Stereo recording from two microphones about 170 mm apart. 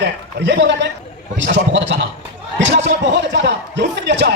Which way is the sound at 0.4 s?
90° right.